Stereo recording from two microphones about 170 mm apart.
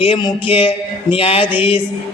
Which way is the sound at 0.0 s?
25° left (ahead or behind).